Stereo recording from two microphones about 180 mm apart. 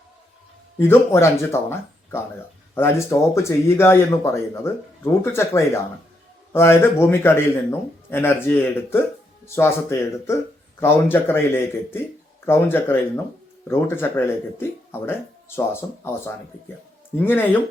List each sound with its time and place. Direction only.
0.8 s speech: 15° left (ahead or behind)